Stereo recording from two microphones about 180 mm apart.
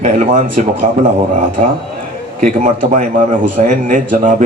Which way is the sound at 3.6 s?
45° right (ahead or behind).